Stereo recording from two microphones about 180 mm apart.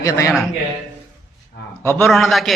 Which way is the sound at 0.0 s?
15° left (ahead or behind).